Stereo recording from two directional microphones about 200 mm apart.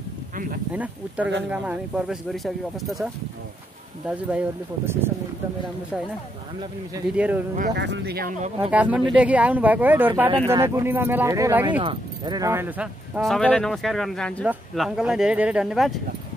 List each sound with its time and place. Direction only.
0.7 s speech: 5° right (ahead or behind)
4.3 s speech: 10° right (ahead or behind)
7.2 s speech: 5° right (ahead or behind)
7.7 s speech: 60° right (ahead or behind)
8.6 s speech: 5° right (ahead or behind)
11.8 s speech: 25° right (ahead or behind); by 16.0 s centre (ahead or behind)